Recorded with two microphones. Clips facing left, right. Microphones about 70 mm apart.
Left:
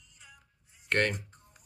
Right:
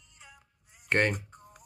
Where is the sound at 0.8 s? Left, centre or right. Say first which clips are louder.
Right 2 dB; right.